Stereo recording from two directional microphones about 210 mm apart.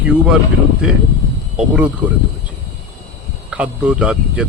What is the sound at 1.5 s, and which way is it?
Speech, 5° right (ahead or behind).